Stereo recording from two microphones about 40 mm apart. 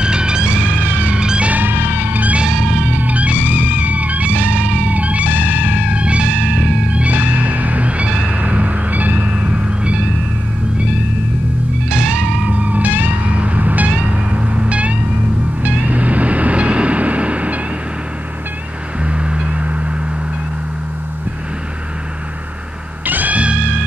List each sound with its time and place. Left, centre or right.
0.0 s music: right
1.5 s music: right
2.1 s music: right
2.4 s music: right
2.9 s music: right
9.3 s cat: right
11.9 s music: right
14.0 s vehicle: right
15.8 s train: right
19.0 s music: right
23.0 s music: right